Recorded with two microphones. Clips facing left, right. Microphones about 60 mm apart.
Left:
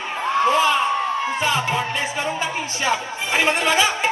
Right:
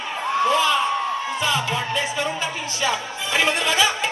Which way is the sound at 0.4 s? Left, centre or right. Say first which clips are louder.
Left 1 dB; left.